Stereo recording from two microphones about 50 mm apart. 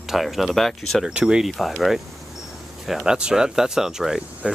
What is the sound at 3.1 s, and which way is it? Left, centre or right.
Speech, centre.